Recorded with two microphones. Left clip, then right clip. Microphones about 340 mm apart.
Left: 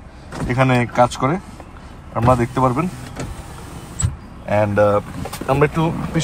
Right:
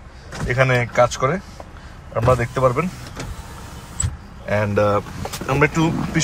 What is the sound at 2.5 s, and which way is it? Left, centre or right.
Speech, centre.